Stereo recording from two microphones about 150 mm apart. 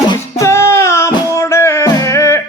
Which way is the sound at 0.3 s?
20° left (ahead or behind).